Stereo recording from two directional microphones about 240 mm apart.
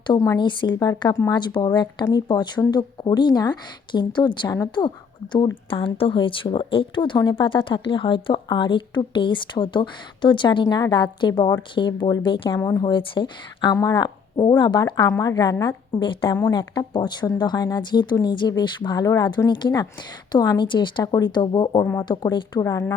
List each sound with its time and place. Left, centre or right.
0.1 s speech: centre